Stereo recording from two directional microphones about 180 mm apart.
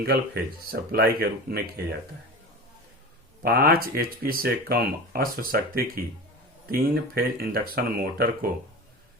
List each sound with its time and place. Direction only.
0.0 s speech: 55° right (ahead or behind)
3.4 s speech: 60° right (ahead or behind)